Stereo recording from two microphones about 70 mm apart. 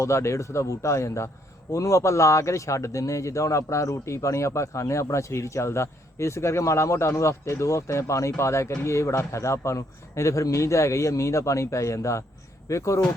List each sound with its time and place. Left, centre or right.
0.0 s a man's voice: left